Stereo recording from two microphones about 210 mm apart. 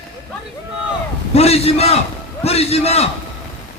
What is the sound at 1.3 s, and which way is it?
A man's voice, 30° left (ahead or behind).